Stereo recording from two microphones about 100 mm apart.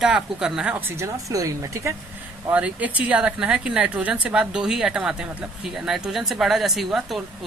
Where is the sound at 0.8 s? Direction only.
25° right (ahead or behind).